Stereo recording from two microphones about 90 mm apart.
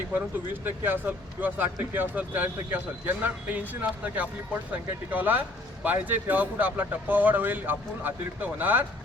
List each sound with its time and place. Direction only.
0.6 s speech: 20° right (ahead or behind)